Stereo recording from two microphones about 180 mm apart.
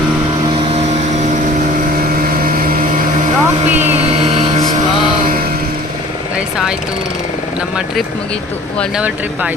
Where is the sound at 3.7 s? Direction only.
10° right (ahead or behind).